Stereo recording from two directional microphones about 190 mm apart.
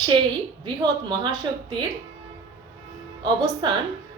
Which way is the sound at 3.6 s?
25° right (ahead or behind).